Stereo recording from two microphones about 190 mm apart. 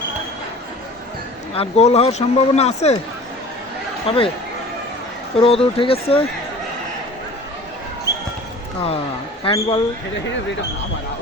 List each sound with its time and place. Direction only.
1.5 s speech: 35° left (ahead or behind)
4.0 s speech: 30° left (ahead or behind)
5.4 s speech: 30° left (ahead or behind)
9.4 s speech: 30° left (ahead or behind)